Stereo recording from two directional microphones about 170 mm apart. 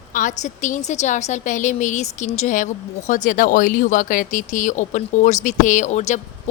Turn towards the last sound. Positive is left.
turn(degrees=40)  # may be behind; listen again after turning